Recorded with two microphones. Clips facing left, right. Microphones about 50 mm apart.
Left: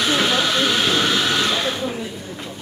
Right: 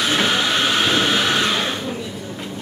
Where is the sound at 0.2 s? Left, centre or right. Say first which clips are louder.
Even; right.